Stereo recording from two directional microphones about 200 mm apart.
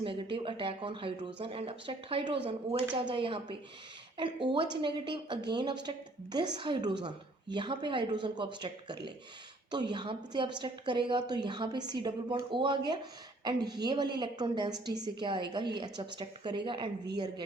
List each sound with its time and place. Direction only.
0.0 s a woman's voice: 25° right (ahead or behind)